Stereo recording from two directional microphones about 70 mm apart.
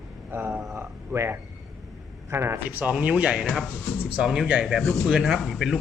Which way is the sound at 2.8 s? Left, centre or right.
Centre.